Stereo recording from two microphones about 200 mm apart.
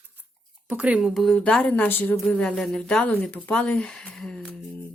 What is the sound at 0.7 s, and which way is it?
Speech, 5° right (ahead or behind).